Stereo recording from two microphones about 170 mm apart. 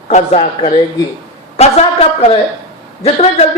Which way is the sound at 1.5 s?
35° left (ahead or behind).